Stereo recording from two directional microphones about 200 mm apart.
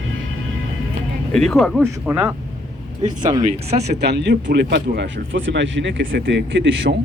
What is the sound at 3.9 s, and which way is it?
Speech, 55° right (ahead or behind).